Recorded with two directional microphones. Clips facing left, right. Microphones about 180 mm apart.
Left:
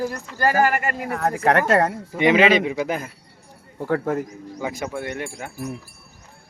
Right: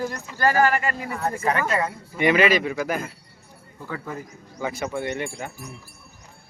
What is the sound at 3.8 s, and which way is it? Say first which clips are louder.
Speech: left 11 dB; 70° left (ahead or behind).